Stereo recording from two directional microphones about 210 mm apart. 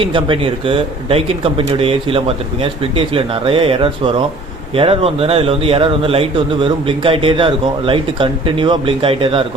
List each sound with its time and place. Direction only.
0.0 s speech: 25° right (ahead or behind)